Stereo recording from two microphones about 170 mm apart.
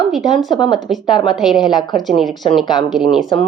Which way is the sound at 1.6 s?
25° left (ahead or behind).